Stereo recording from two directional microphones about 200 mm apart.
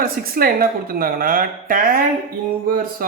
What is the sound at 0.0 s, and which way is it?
A woman's voice, 45° right (ahead or behind).